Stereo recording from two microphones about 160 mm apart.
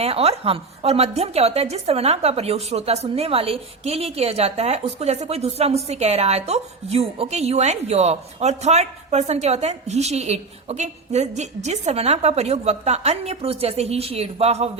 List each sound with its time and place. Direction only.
0.0 s a woman's voice: 40° right (ahead or behind)